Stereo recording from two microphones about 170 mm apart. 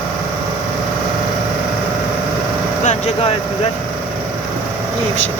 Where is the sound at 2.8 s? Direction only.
45° left (ahead or behind).